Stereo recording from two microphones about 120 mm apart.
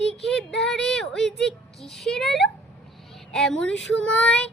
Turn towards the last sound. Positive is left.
turn(degrees=10)  # may be behind; listen again after turning